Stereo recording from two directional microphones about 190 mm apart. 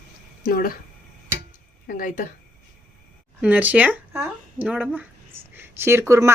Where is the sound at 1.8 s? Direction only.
45° left (ahead or behind).